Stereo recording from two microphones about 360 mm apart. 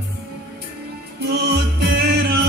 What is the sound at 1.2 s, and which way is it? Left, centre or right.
Music, right.